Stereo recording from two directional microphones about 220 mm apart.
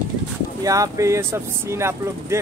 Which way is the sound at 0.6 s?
15° right (ahead or behind).